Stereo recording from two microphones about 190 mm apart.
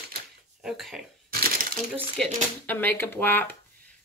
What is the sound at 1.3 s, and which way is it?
Crushing, 50° right (ahead or behind).